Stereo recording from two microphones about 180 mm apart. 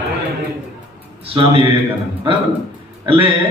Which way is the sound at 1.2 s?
30° right (ahead or behind).